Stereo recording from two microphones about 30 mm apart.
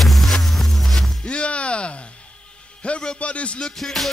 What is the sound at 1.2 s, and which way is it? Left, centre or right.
Music, left.